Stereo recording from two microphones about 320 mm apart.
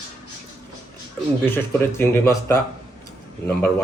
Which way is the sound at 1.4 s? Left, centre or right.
Centre.